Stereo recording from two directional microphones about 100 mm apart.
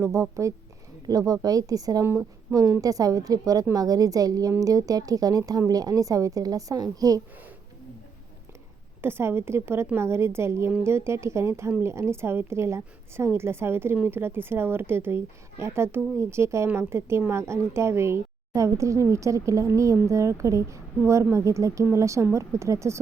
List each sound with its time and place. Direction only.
0.0 s a woman's voice: 30° right (ahead or behind)
9.0 s a woman's voice: 25° right (ahead or behind)